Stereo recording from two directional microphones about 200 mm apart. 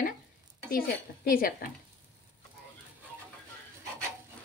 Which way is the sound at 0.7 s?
45° left (ahead or behind).